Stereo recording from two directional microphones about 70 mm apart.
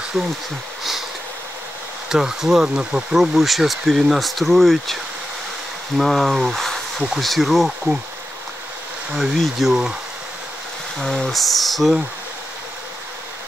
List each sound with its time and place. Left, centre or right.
0.2 s speech: right
2.0 s speech: centre
3.3 s speech: centre
5.9 s speech: centre
9.1 s speech: centre
11.0 s speech: centre